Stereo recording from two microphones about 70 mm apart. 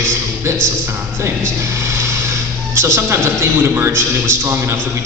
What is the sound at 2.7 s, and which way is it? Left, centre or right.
A man's voice, right.